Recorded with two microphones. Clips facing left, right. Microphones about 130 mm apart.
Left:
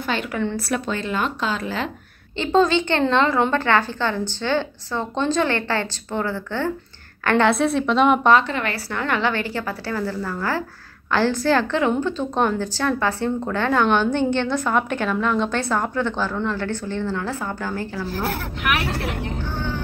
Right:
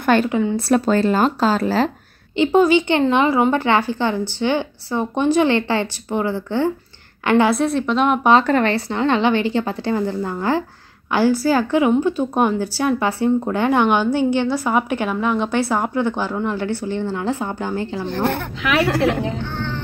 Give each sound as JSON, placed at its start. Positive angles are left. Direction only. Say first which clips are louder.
{"t": 0.1, "sound": "a woman's voice", "louder": "right 10 dB", "side_deg": -55}
{"t": 0.6, "sound": "speech", "louder": "right 8 dB", "side_deg": -35}
{"t": 2.3, "sound": "speech", "louder": "right 4 dB", "side_deg": -15}
{"t": 7.5, "sound": "a woman's voice", "louder": "even", "side_deg": 0}
{"t": 8.6, "sound": "a woman's voice", "louder": "right 6 dB", "side_deg": -25}
{"t": 18.0, "sound": "a woman's voice", "louder": "right 6 dB", "side_deg": 5}